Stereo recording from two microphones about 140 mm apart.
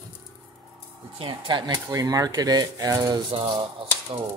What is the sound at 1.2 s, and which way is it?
Speech, 35° right (ahead or behind).